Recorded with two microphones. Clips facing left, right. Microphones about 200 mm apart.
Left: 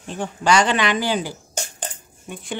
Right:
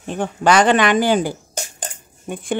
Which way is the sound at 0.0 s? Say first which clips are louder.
Right 5 dB; 60° right (ahead or behind).